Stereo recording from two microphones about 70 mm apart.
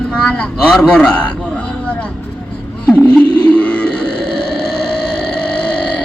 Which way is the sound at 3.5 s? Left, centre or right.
Centre.